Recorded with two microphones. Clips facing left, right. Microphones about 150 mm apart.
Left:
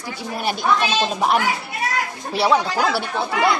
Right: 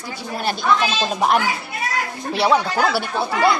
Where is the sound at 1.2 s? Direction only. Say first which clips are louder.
Right 4 dB; centre (ahead or behind).